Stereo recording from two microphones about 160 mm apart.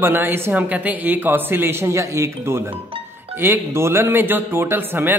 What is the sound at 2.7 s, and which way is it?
Music, 35° right (ahead or behind).